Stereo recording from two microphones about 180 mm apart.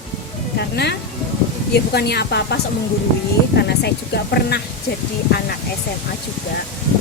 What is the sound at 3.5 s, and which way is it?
Speech, 65° left (ahead or behind).